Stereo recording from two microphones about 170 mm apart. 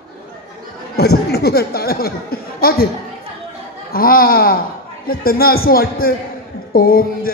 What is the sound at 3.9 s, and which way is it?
A man's voice, 60° left (ahead or behind).